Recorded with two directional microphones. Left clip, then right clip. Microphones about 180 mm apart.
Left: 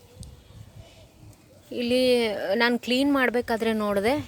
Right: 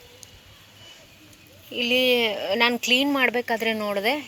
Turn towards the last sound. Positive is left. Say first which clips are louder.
# even
turn(degrees=40)  # may be behind; listen again after turning